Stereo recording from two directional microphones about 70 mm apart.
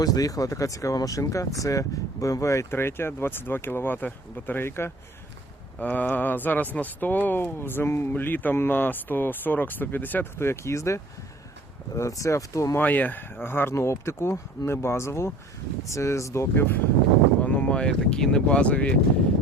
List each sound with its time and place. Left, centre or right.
0.0 s speech: left
5.8 s speech: left
12.7 s speech: left
17.4 s speech: left